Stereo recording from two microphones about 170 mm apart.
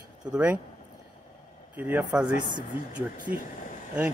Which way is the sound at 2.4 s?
50° right (ahead or behind).